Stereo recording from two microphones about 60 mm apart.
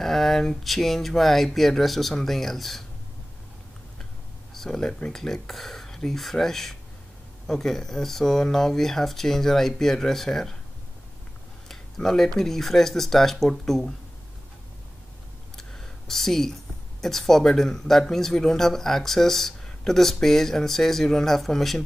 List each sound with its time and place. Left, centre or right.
0.0 s speech: centre
4.6 s speech: centre
11.7 s speech: centre
15.5 s a sound: centre
17.0 s speech: centre